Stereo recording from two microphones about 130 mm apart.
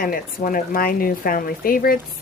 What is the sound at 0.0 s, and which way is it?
Speech, 90° left.